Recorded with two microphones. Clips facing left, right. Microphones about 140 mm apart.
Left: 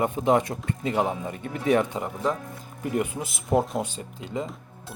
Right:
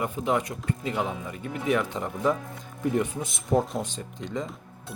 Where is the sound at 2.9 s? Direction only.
10° left (ahead or behind).